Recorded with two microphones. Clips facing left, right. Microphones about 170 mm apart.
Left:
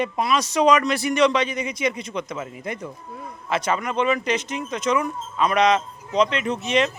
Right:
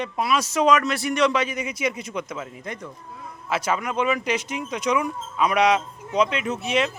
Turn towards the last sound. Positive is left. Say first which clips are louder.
# left 2 dB
turn(degrees=-5)  # may be behind; listen again after turning